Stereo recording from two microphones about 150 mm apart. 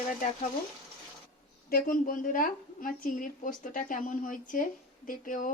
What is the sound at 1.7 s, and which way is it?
A woman's voice, 65° left (ahead or behind).